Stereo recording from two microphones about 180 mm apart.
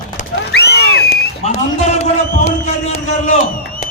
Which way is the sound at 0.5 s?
65° left (ahead or behind).